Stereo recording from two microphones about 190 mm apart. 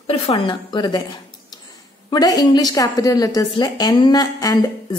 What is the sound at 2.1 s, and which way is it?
Speech, 20° left (ahead or behind).